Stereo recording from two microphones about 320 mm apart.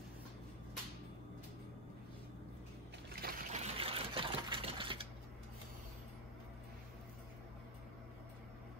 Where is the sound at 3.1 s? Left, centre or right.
Right.